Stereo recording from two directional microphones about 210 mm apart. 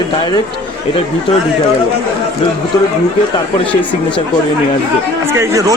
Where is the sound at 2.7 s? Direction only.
15° left (ahead or behind).